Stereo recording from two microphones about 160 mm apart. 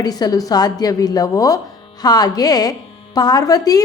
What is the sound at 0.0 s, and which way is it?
A woman's voice, 25° left (ahead or behind).